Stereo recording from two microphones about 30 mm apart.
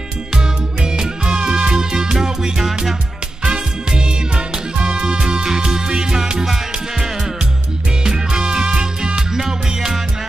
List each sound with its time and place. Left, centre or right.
0.4 s music: right
5.2 s music: right
8.3 s music: right
9.3 s music: centre